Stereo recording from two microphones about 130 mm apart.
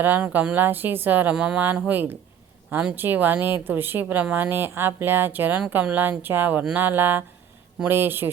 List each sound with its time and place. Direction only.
0.0 s speech: 15° right (ahead or behind)